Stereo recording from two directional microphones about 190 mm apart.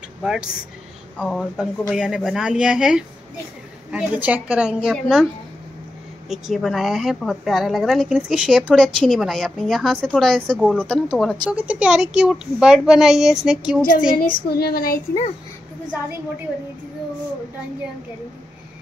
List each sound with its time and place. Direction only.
0.2 s a woman's voice: 5° right (ahead or behind)
6.2 s a woman's voice: centre (ahead or behind)
14.2 s child singing: 55° left (ahead or behind)